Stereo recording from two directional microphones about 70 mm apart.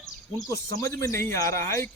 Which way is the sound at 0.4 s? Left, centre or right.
Left.